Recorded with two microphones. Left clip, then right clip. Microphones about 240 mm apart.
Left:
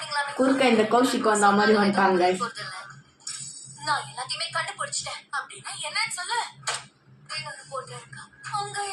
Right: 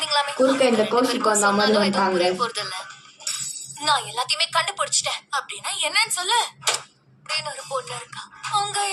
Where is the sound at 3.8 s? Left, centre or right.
Right.